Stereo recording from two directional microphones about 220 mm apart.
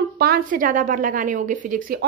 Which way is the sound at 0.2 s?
40° right (ahead or behind).